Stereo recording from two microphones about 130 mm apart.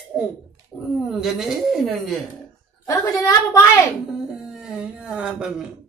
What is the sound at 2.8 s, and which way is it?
Speech, 25° left (ahead or behind).